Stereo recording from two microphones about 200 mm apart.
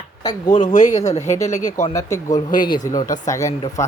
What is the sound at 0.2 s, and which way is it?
Speech, 20° left (ahead or behind).